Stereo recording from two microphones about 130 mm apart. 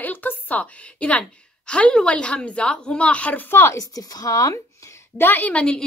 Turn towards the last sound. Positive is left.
turn(degrees=10)  # may be behind; listen again after turning